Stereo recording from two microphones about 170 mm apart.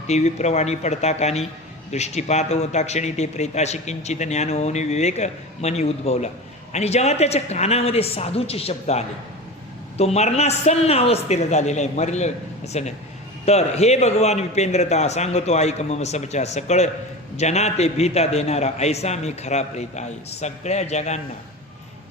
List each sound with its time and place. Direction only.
0.1 s speech: 40° left (ahead or behind)